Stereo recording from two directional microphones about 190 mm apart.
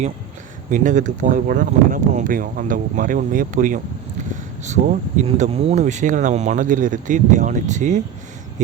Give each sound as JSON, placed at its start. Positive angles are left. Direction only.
{"t": 0.7, "sound": "speech", "side_deg": -40}